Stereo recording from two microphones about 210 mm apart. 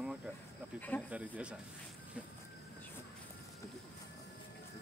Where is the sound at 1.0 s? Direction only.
5° right (ahead or behind).